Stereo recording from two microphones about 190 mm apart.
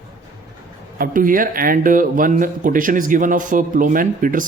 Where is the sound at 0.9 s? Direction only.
50° right (ahead or behind).